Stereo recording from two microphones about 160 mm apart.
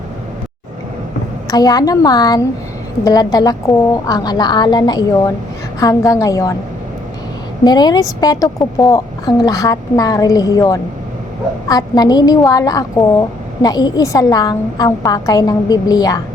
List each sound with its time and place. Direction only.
1.5 s a woman's voice: 25° left (ahead or behind)
7.6 s a woman's voice: 25° left (ahead or behind)